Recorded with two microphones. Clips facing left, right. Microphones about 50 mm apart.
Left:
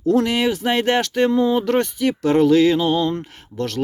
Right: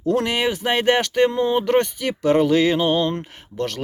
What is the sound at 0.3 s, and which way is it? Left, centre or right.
Speech, centre.